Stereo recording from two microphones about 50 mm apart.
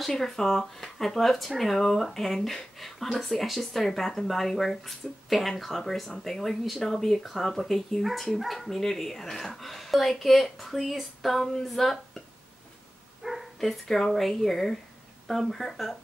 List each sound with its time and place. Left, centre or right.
0.1 s speech: centre
13.2 s dog: centre
13.6 s speech: centre